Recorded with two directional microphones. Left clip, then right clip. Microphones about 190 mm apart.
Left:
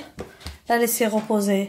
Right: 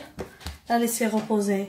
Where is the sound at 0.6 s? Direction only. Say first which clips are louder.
Left 4 dB; 45° left (ahead or behind).